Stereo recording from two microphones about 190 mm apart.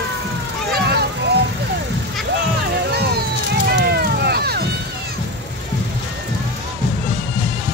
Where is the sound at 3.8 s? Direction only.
60° right (ahead or behind).